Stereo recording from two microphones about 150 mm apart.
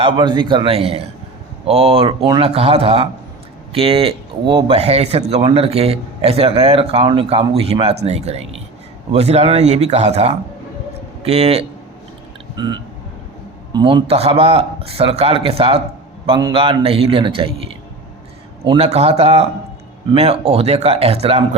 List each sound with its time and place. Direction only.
0.0 s a man's voice: 30° right (ahead or behind)
13.7 s a man's voice: 30° right (ahead or behind)
14.1 s speech: 40° right (ahead or behind)
18.8 s speech: 45° right (ahead or behind)